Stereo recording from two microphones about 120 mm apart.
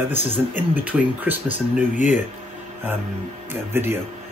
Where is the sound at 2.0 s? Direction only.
85° left.